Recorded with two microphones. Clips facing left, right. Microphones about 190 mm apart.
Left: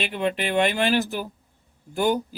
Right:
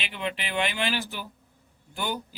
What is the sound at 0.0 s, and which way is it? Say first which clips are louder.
Speech: left 8 dB; 45° left (ahead or behind).